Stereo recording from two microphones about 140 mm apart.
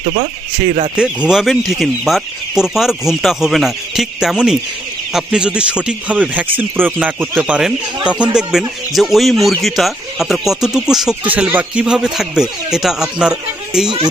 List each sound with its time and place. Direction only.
0.0 s speech: 65° right (ahead or behind)
0.9 s speech: 5° right (ahead or behind)